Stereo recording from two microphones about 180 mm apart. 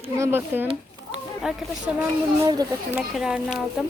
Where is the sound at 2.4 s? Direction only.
20° right (ahead or behind).